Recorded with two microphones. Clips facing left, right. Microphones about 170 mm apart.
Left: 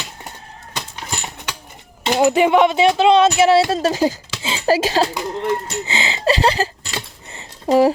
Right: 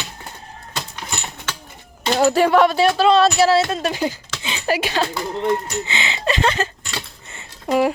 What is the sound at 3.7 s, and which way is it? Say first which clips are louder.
Speech: left 5 dB; 35° left (ahead or behind).